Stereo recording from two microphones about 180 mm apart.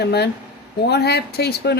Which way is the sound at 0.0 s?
65° left (ahead or behind).